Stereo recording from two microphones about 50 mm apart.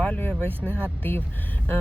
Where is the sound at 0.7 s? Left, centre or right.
Right.